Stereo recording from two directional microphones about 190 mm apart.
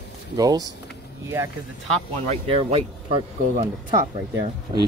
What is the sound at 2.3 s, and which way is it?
Speech, 30° right (ahead or behind).